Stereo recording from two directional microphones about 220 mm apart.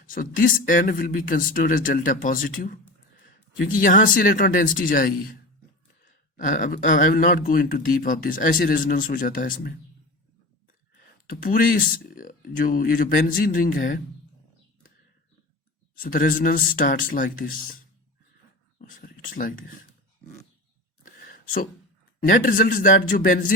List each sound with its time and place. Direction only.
0.0 s speech: 40° left (ahead or behind)
3.8 s speech: 35° left (ahead or behind)
11.3 s speech: 40° left (ahead or behind)
16.0 s speech: 40° left (ahead or behind)
18.8 s speech: 40° left (ahead or behind)
21.0 s a sound: 40° left (ahead or behind)
22.2 s speech: 40° left (ahead or behind)